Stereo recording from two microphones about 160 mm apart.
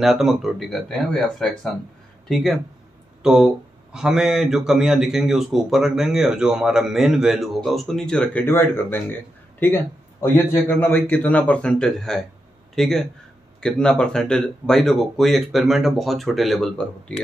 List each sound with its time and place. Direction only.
0.0 s a man's voice: centre (ahead or behind)